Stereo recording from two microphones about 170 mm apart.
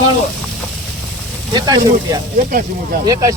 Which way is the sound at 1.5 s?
25° right (ahead or behind).